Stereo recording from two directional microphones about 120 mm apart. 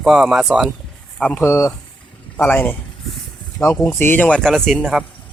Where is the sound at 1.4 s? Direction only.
20° left (ahead or behind); by 5.0 s centre (ahead or behind).